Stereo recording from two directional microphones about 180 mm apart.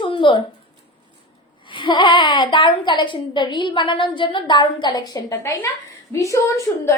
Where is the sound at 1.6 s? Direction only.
25° left (ahead or behind).